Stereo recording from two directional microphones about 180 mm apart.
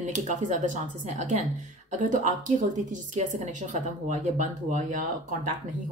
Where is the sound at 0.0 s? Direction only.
45° right (ahead or behind).